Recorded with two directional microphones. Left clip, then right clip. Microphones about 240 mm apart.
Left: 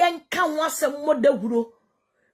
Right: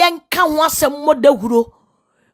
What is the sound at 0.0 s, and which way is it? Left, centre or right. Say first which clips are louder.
Speech: right 7 dB; right.